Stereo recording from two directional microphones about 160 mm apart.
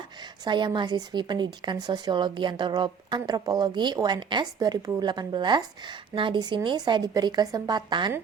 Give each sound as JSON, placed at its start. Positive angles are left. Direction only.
{"t": 0.4, "sound": "a woman's voice", "side_deg": -30}